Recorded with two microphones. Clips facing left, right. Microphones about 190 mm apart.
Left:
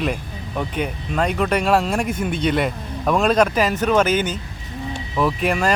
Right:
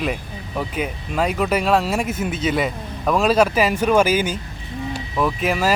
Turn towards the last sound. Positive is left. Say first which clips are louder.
# even
turn(degrees=-5)  # may be behind; listen again after turning